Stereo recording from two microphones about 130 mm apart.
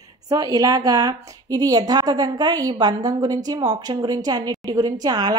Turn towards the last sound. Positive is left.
turn(degrees=-30)  # may be behind; listen again after turning